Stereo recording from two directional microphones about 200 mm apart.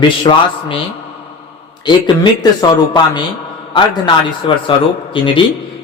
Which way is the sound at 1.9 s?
20° left (ahead or behind).